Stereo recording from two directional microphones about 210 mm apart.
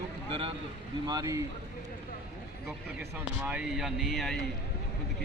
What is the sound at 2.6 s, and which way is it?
Speech, 10° right (ahead or behind).